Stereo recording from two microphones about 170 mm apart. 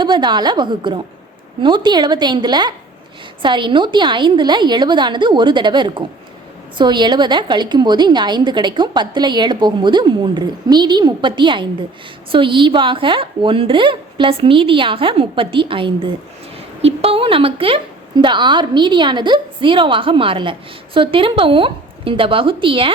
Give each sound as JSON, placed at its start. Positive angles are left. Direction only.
{"t": 0.0, "sound": "a woman's voice", "side_deg": -25}